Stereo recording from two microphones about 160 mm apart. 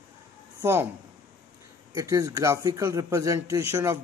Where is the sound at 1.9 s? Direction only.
20° right (ahead or behind).